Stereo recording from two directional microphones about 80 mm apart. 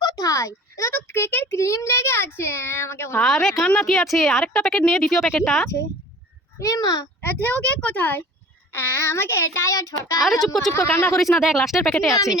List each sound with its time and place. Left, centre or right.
0.0 s a child's voice: left
3.2 s speech: centre
6.6 s a child's voice: left
7.4 s a child's voice: centre
8.7 s child singing: left
10.4 s speech: centre
10.8 s child singing: left
11.2 s speech: centre
12.1 s a child's voice: left